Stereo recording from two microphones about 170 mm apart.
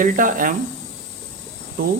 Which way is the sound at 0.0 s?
55° right (ahead or behind).